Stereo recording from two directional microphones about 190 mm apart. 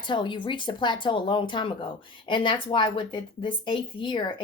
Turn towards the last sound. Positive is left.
turn(degrees=25)  # may be behind; listen again after turning